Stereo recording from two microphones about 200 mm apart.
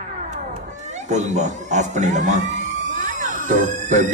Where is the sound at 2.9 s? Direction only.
40° right (ahead or behind).